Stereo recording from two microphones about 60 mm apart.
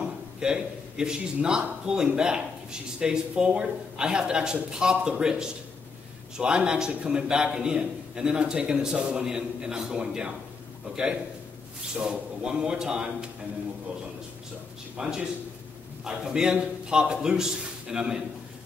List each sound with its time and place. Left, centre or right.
0.4 s a man's voice: centre
11.9 s a man's voice: centre
15.0 s a man's voice: centre